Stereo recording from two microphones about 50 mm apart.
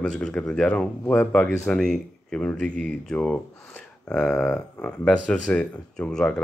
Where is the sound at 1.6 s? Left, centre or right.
Centre.